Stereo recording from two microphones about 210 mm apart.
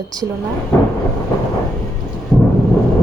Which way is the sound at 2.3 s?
Centre (ahead or behind).